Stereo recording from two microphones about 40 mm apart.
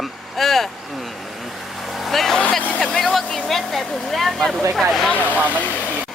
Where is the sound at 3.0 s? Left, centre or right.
Centre.